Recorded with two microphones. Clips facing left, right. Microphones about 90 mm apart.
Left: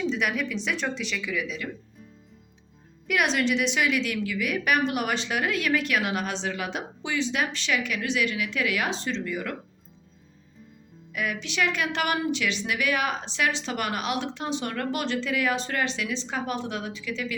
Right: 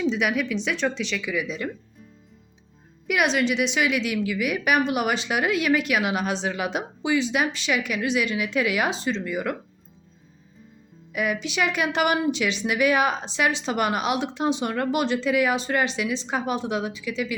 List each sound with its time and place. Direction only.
0.1 s a woman's voice: 5° right (ahead or behind)
1.2 s a woman's voice: 10° right (ahead or behind)
1.5 s speech: 35° right (ahead or behind)
3.1 s a woman's voice: 5° right (ahead or behind)
11.1 s a woman's voice: 15° right (ahead or behind)